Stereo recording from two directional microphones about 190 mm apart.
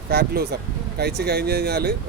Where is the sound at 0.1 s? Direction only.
55° right (ahead or behind).